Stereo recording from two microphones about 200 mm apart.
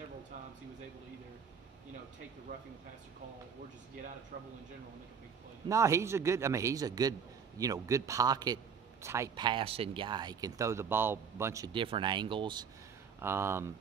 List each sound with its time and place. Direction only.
5.7 s a man's voice: 15° right (ahead or behind)
13.2 s a man's voice: 10° right (ahead or behind)